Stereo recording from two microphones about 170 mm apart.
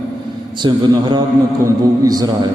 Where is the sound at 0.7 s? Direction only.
25° right (ahead or behind).